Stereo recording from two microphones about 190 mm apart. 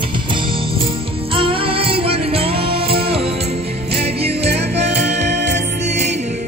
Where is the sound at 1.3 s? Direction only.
30° right (ahead or behind).